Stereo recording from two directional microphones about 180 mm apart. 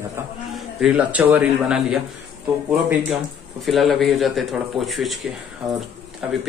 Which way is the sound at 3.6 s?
Centre (ahead or behind).